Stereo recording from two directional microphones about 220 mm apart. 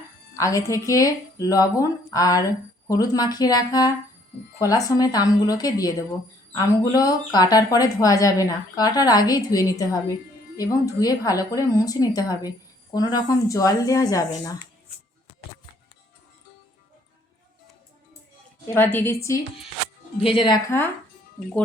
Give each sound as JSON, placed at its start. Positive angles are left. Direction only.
{"t": 0.3, "sound": "speech", "side_deg": 15}
{"t": 18.7, "sound": "speech", "side_deg": 10}
{"t": 20.2, "sound": "speech", "side_deg": 25}